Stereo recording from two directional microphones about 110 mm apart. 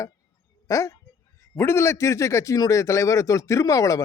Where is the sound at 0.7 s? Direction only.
30° left (ahead or behind).